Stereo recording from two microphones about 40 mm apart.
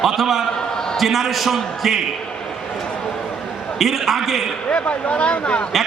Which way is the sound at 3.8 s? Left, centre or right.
Centre.